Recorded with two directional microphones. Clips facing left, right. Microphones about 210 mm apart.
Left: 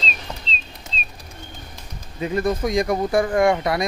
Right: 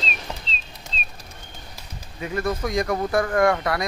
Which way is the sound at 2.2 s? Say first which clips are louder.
Left 4 dB; 20° left (ahead or behind).